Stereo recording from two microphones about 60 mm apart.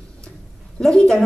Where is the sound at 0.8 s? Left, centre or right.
Centre.